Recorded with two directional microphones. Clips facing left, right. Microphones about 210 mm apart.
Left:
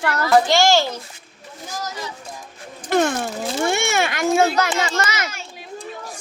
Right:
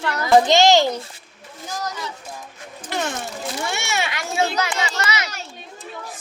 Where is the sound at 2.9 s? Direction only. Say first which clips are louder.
Left 8 dB; 50° left (ahead or behind).